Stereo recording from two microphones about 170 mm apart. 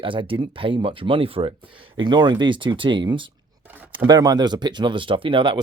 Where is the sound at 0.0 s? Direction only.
30° right (ahead or behind).